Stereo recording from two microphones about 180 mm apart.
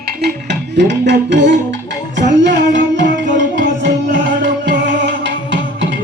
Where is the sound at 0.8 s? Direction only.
75° right (ahead or behind).